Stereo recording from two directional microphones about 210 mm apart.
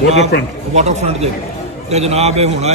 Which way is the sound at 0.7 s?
30° right (ahead or behind).